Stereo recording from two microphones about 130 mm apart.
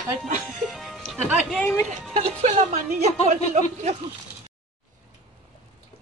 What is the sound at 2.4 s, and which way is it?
A woman's voice, 65° right (ahead or behind).